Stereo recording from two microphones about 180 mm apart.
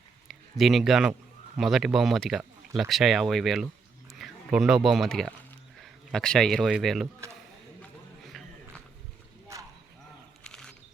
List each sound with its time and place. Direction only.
0.3 s speech: centre (ahead or behind)
7.8 s run: centre (ahead or behind)
9.5 s a sound: 15° right (ahead or behind)
10.4 s wild animals: 5° left (ahead or behind)